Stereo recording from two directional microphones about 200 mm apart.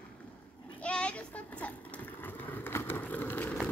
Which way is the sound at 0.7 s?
5° left (ahead or behind).